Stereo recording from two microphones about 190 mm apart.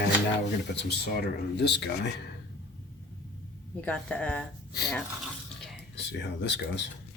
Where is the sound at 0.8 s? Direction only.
60° left (ahead or behind).